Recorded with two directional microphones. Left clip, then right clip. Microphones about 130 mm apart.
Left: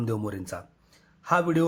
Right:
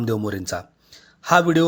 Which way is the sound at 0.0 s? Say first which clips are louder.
Right 7 dB; 20° right (ahead or behind).